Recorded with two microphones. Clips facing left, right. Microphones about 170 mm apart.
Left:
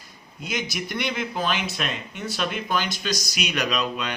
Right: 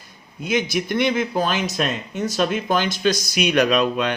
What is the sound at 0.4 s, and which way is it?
Speech, 50° right (ahead or behind).